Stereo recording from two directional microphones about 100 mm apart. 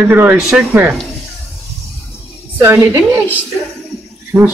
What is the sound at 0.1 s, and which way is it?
Speech, 20° right (ahead or behind).